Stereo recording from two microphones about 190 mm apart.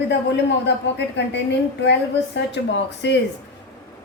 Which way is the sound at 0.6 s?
65° left (ahead or behind).